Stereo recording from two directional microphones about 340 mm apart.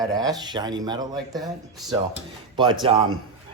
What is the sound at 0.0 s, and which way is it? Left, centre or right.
Speech, centre.